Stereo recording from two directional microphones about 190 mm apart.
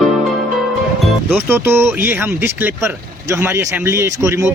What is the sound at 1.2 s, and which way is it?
Speech, 10° right (ahead or behind).